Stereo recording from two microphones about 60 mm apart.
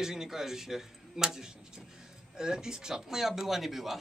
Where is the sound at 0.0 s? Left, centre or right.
Centre.